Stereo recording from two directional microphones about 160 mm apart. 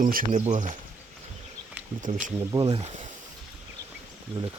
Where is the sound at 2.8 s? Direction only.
45° right (ahead or behind).